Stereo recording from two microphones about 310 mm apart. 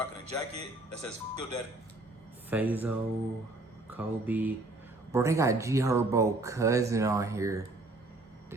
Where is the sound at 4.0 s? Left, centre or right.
Centre.